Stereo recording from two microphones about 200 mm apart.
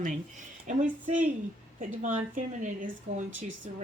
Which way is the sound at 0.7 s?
40° right (ahead or behind).